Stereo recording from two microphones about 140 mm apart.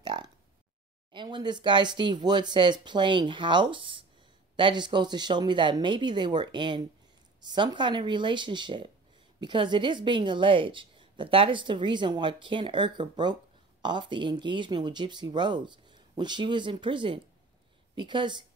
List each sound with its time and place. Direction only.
0.0 s a woman's voice: 30° right (ahead or behind)